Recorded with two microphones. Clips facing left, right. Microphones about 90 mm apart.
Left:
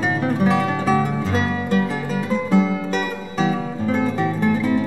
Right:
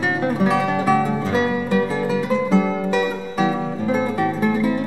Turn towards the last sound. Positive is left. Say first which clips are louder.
# even
turn(degrees=-10)  # may be behind; listen again after turning